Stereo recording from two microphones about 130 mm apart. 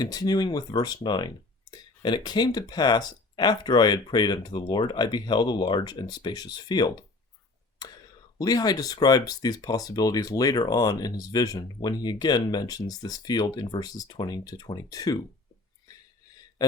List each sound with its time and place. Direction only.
0.0 s speech: 30° left (ahead or behind)
8.4 s speech: 30° left (ahead or behind)
15.9 s a sound: 30° left (ahead or behind)